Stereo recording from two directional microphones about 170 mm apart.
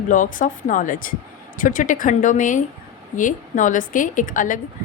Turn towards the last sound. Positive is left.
turn(degrees=50)  # may be behind; listen again after turning